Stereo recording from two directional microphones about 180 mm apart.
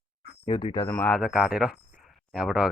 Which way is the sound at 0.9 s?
5° left (ahead or behind).